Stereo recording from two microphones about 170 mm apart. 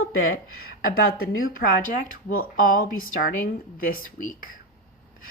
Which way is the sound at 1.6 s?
55° left (ahead or behind).